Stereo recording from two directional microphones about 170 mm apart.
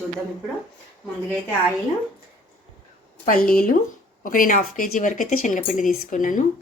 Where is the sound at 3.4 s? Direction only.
55° left (ahead or behind).